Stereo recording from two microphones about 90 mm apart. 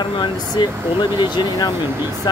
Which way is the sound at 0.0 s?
60° left (ahead or behind).